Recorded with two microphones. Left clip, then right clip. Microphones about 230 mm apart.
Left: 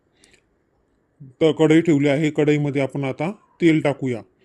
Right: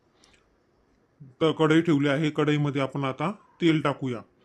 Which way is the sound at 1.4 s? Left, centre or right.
Centre.